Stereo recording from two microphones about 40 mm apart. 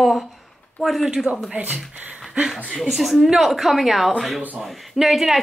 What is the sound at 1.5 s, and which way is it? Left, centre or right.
Speech, right.